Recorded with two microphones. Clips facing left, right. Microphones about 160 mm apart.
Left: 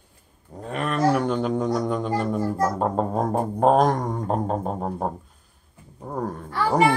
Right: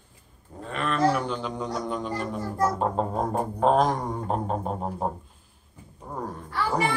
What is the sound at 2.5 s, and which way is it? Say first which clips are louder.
A child's voice: right 3 dB; 45° left (ahead or behind).